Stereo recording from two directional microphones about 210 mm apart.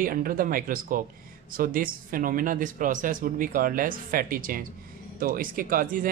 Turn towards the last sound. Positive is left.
turn(degrees=-40)  # may be behind; listen again after turning